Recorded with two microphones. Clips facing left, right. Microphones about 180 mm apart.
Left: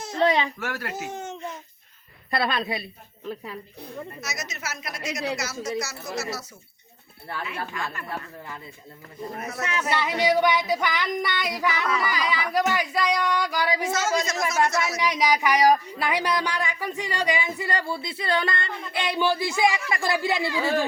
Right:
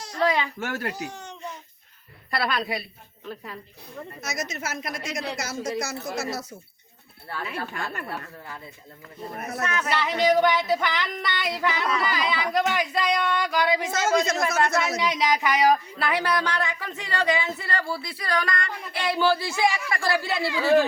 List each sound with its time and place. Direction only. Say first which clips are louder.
0.0 s speech: left 2 dB; 25° left (ahead or behind)
0.6 s speech: right 2 dB; 25° right (ahead or behind)
0.9 s speech: left 3 dB; 25° left (ahead or behind)
4.2 s speech: right 3 dB; 50° right (ahead or behind)
7.5 s speech: even; 45° right (ahead or behind)
9.4 s a man's voice: right 3 dB; 55° right (ahead or behind)
9.9 s speech: right 1 dB; 15° left (ahead or behind)
13.9 s a man's voice: right 2 dB; 55° right (ahead or behind)
15.0 s speech: left 1 dB; 10° left (ahead or behind)